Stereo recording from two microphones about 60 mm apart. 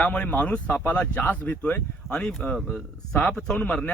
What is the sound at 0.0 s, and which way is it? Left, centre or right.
Speech, centre.